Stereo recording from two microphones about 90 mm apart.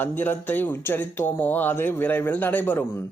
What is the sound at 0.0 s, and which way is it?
A man's voice, 20° left (ahead or behind).